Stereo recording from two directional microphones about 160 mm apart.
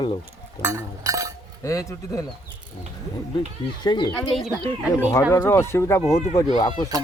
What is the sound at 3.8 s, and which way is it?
Speech, 25° left (ahead or behind).